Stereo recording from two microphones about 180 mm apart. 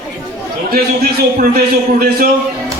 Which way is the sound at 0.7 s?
55° right (ahead or behind).